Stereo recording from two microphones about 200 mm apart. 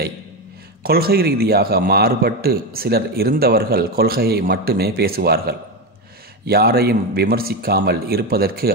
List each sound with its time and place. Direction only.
0.8 s a man's voice: 50° right (ahead or behind)